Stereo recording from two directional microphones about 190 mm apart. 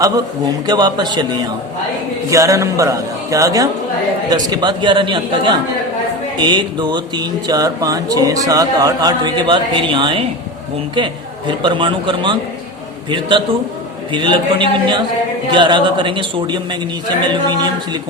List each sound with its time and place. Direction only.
0.0 s a man's voice: 20° right (ahead or behind)